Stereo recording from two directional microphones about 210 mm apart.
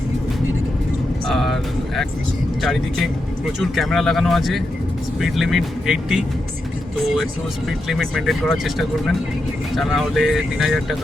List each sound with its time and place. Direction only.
1.3 s speech: centre (ahead or behind)
2.6 s speech: centre (ahead or behind)
7.9 s speech: centre (ahead or behind)